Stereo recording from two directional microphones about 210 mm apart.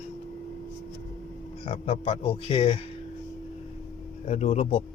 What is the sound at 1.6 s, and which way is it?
Speech, 25° left (ahead or behind).